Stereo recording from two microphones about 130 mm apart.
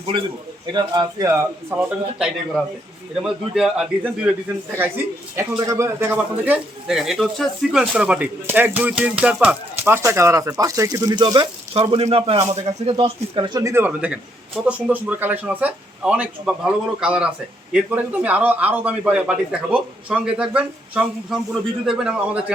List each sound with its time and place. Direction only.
0.0 s a man's voice: 40° right (ahead or behind)
3.2 s speech: 5° right (ahead or behind)
5.4 s speech: 25° right (ahead or behind)
11.7 s speech: 45° right (ahead or behind)
13.6 s speech: 20° right (ahead or behind)